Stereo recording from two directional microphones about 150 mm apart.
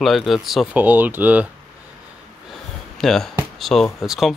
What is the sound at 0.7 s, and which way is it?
Speech, 10° right (ahead or behind).